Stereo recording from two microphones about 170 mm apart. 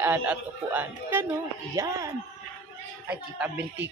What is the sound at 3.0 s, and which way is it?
Speech, 10° right (ahead or behind).